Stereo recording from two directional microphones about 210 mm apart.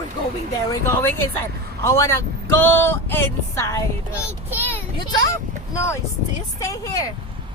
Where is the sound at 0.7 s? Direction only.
10° left (ahead or behind).